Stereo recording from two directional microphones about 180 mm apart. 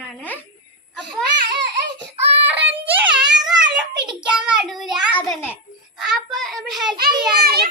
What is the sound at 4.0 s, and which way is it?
A child's voice, 5° right (ahead or behind).